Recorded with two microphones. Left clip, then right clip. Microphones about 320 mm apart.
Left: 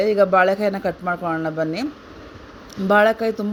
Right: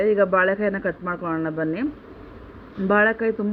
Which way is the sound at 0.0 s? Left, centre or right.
Left.